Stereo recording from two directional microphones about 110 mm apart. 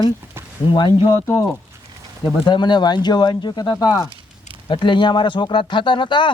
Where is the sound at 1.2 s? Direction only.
25° left (ahead or behind).